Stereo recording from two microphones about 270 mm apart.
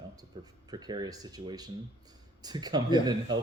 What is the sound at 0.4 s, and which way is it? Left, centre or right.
Speech, centre.